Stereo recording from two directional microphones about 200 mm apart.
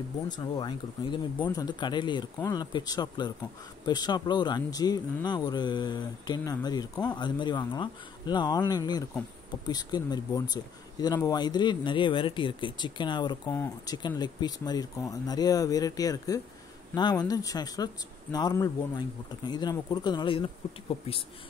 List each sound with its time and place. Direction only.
0.3 s speech: 20° left (ahead or behind)
13.5 s speech: 10° left (ahead or behind)